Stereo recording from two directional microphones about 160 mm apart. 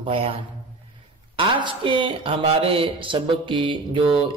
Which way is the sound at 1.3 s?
30° right (ahead or behind).